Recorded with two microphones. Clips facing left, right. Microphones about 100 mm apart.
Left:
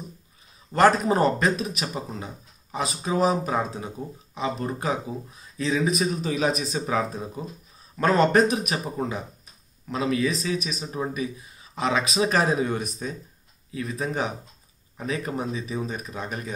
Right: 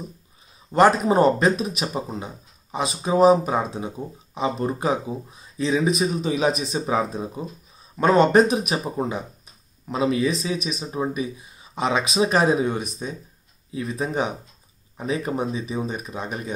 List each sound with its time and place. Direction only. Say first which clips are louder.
0.7 s speech: right 2 dB; 20° right (ahead or behind)